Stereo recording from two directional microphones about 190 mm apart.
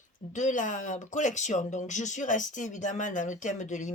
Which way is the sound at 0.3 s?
40° left (ahead or behind).